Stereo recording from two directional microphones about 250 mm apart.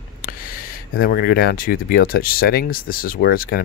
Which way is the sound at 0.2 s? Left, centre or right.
Left.